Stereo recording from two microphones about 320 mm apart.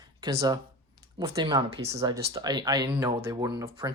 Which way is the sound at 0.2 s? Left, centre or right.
Centre.